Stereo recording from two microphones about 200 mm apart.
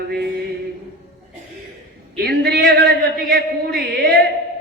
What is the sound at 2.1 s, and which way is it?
Speech, 50° right (ahead or behind).